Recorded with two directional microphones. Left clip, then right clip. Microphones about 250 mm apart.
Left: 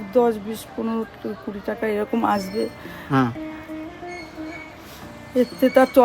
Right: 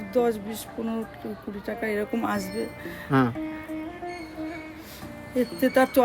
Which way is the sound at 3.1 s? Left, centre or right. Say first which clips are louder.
Left 2 dB; centre.